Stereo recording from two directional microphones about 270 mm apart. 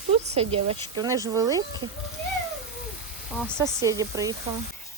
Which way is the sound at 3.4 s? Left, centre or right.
Centre.